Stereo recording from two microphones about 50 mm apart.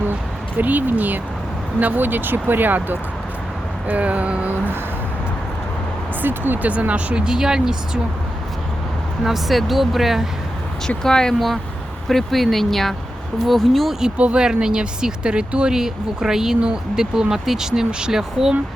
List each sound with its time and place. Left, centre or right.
0.6 s speech: right
3.8 s music: right
6.2 s speech: right
6.7 s speech: right
9.2 s speech: centre
10.8 s speech: centre
11.3 s speech: centre
14.2 s music: right
14.4 s speech: centre